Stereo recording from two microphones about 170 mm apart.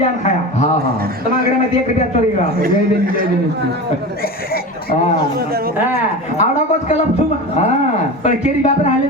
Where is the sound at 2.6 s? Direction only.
55° right (ahead or behind).